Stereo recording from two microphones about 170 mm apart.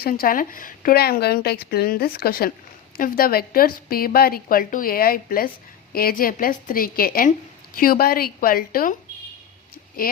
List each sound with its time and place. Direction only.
0.0 s speech: 60° left (ahead or behind)